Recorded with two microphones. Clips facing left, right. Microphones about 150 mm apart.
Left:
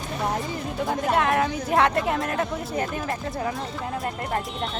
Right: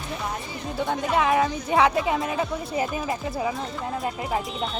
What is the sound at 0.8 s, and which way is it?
A woman's voice, centre (ahead or behind).